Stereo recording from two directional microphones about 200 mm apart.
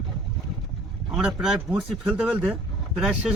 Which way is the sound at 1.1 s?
Centre (ahead or behind).